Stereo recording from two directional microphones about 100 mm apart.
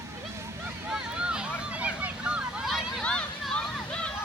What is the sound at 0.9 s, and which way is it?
Vehicle, 10° right (ahead or behind).